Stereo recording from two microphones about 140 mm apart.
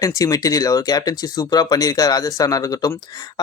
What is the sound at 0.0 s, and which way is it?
Speech, 25° left (ahead or behind).